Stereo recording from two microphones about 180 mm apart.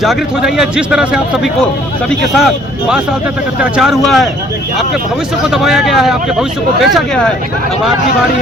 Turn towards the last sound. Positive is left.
turn(degrees=0)  # may be behind; listen again after turning